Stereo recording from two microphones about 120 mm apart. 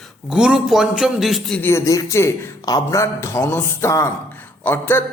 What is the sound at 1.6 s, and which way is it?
A man's voice, 25° left (ahead or behind).